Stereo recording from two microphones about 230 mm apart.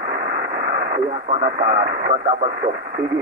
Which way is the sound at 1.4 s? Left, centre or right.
Right.